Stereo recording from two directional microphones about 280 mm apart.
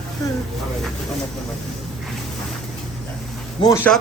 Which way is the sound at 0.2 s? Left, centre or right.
Centre.